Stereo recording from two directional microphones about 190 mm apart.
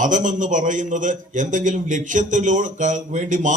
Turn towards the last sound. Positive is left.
turn(degrees=-40)  # may be behind; listen again after turning